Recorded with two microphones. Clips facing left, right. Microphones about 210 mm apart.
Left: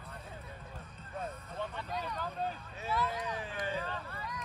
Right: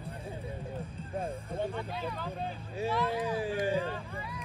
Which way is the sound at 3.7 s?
10° right (ahead or behind).